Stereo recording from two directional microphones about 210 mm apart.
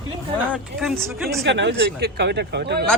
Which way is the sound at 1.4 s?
55° right (ahead or behind).